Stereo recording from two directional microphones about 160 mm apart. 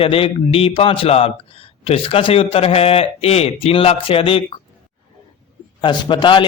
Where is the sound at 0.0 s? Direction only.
35° left (ahead or behind).